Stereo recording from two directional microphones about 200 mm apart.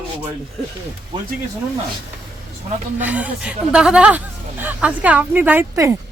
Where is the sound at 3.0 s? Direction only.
5° right (ahead or behind).